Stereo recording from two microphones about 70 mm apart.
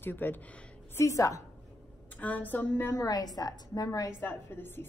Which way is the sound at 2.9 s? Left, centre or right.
Left.